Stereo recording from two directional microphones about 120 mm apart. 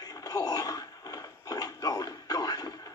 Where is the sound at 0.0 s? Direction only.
30° left (ahead or behind).